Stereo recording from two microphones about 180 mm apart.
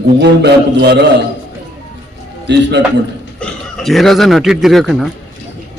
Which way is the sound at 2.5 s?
80° right.